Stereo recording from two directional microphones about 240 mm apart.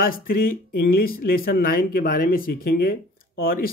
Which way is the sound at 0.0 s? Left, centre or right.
Left.